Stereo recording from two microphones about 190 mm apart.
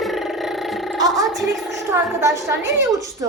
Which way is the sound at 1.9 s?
15° right (ahead or behind).